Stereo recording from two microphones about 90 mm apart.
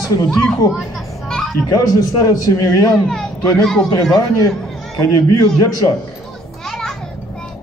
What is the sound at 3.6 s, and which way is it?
Speech, 5° left (ahead or behind).